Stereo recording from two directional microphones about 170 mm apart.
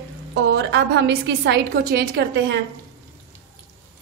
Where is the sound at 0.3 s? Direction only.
85° right; by 2.2 s 70° right (ahead or behind).